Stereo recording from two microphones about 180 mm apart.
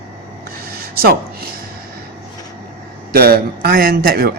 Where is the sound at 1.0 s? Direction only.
55° right (ahead or behind).